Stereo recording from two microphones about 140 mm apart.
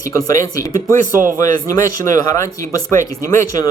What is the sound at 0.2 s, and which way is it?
Speech, 25° left (ahead or behind).